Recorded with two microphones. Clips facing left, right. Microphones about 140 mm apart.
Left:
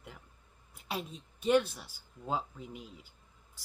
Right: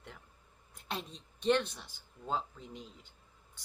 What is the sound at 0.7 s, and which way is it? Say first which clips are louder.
Speech: left 2 dB; 5° left (ahead or behind).